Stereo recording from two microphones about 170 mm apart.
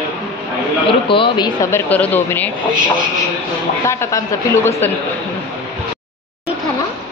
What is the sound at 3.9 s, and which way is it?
A woman's voice, 15° left (ahead or behind).